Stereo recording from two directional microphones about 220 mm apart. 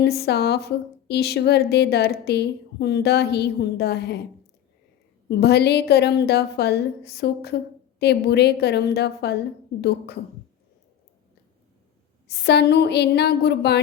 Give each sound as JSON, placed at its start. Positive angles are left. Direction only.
{"t": 0.0, "sound": "speech", "side_deg": 45}
{"t": 5.3, "sound": "speech", "side_deg": 50}
{"t": 12.3, "sound": "speech", "side_deg": 50}